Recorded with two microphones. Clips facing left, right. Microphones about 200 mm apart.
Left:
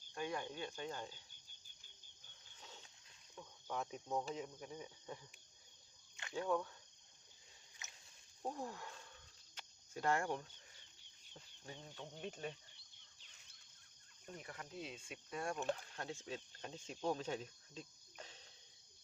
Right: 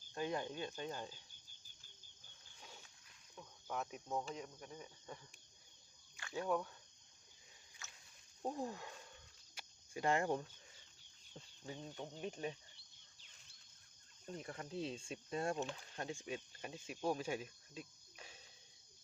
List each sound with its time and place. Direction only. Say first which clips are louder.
0.1 s cricket: right 2 dB; 25° right (ahead or behind)
0.6 s speech: right 1 dB; 20° right (ahead or behind)
2.6 s a sound: even; 10° right (ahead or behind)
3.7 s cricket: even; 5° right (ahead or behind)
6.2 s cricket: even; 25° left (ahead or behind)
7.8 s a sound: right 1 dB; 20° left (ahead or behind)
8.4 s speech: right 3 dB; 15° right (ahead or behind)
9.6 s cricket: right 2 dB; 15° right (ahead or behind)
11.3 s speech: right 5 dB; 20° right (ahead or behind)
14.3 s speech: right 4 dB; 30° right (ahead or behind); by 18.4 s 10° right (ahead or behind)